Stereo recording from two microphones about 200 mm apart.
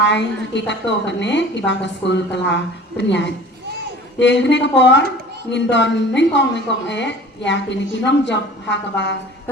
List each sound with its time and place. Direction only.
0.0 s a woman's voice: 60° left (ahead or behind)